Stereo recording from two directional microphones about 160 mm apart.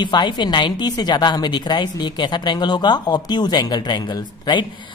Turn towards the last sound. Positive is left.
turn(degrees=30)  # may be behind; listen again after turning